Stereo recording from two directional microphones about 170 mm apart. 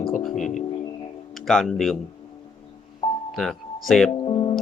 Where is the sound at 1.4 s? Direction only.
Centre (ahead or behind).